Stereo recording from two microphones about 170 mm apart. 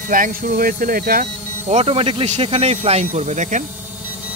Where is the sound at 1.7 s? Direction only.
35° right (ahead or behind).